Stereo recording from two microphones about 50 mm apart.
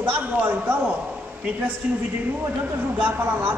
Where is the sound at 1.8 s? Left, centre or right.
Centre.